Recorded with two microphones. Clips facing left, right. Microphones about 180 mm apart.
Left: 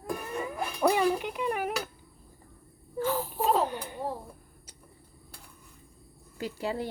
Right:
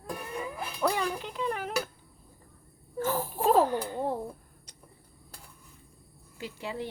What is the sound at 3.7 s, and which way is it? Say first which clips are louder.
Speech: right 6 dB; 15° left (ahead or behind).